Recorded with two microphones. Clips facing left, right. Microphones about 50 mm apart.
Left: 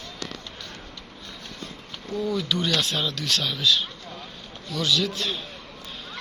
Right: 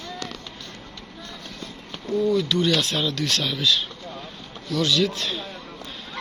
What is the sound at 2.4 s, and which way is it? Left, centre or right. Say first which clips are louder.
Speech: right 4 dB; centre.